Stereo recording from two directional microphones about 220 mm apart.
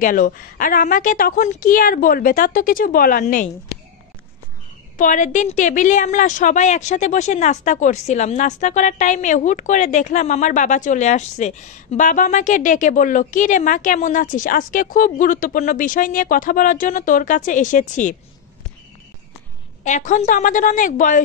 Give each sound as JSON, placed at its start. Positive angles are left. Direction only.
{"t": 0.0, "sound": "a woman's voice", "side_deg": 40}
{"t": 4.9, "sound": "a woman's voice", "side_deg": 35}
{"t": 19.8, "sound": "a woman's voice", "side_deg": 35}